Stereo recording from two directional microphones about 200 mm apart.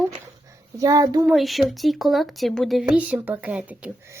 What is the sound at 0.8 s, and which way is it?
Speech, 15° right (ahead or behind).